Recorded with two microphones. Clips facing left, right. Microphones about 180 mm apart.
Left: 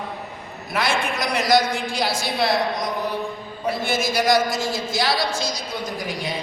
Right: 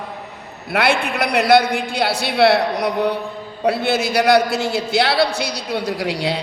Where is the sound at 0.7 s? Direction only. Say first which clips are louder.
Right 5 dB; 65° right (ahead or behind).